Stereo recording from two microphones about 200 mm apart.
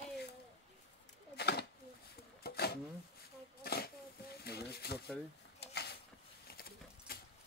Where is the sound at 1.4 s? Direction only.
55° left (ahead or behind).